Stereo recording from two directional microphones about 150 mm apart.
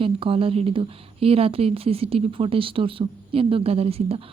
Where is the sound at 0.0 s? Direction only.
35° right (ahead or behind).